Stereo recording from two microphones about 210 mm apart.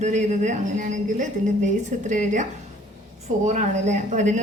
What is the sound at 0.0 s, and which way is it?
A woman's voice, 35° right (ahead or behind).